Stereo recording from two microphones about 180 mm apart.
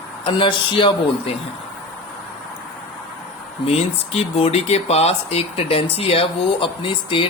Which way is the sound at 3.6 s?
35° left (ahead or behind).